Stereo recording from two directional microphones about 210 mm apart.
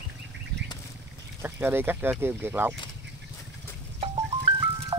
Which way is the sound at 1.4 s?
10° right (ahead or behind).